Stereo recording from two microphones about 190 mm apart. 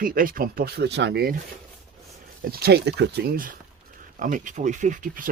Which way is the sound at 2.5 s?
55° right (ahead or behind).